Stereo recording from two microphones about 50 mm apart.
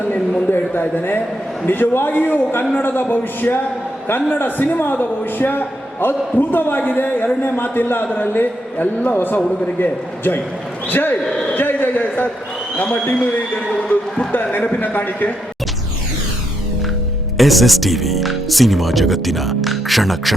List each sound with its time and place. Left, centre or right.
0.5 s a man's voice: left
11.5 s a sound: left
12.7 s a man's voice: left
17.3 s speech: centre